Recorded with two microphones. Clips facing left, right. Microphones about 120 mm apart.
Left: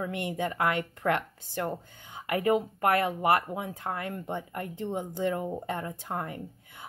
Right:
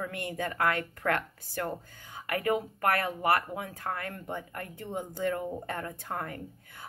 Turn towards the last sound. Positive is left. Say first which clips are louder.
# left 1 dB
turn(degrees=20)  # may be behind; listen again after turning